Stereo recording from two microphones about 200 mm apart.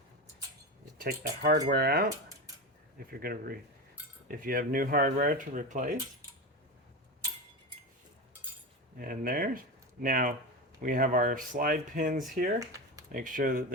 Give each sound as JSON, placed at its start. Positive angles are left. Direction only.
{"t": 0.9, "sound": "speech", "side_deg": -50}
{"t": 3.1, "sound": "speech", "side_deg": -50}
{"t": 9.0, "sound": "speech", "side_deg": -45}
{"t": 12.5, "sound": "a sound", "side_deg": -15}
{"t": 13.1, "sound": "speech", "side_deg": -40}